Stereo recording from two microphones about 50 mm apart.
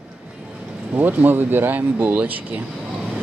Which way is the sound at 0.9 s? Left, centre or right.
Right.